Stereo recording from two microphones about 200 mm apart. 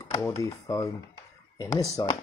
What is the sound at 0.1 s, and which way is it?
Speech, 15° left (ahead or behind).